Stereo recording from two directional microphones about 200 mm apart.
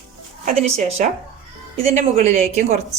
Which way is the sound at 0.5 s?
35° right (ahead or behind).